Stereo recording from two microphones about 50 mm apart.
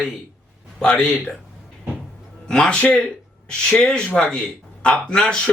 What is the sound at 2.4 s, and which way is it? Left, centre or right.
A man's voice, centre.